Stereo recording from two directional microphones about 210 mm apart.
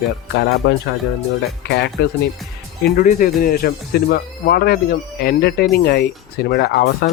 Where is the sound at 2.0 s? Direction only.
45° left (ahead or behind).